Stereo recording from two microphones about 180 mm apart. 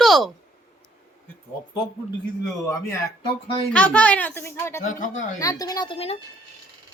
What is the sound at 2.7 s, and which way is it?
Speech, 15° left (ahead or behind).